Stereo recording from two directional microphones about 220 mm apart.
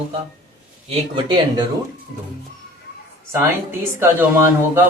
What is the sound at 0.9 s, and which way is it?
Speech, 20° right (ahead or behind).